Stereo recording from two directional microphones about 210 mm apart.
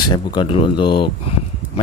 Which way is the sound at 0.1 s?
20° left (ahead or behind).